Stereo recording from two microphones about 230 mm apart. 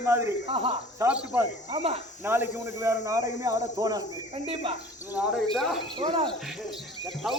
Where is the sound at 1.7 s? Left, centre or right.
Right.